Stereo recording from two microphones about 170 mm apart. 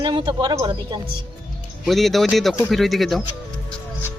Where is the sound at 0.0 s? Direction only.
25° right (ahead or behind).